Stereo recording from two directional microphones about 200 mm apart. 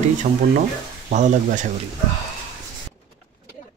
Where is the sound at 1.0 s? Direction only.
35° right (ahead or behind).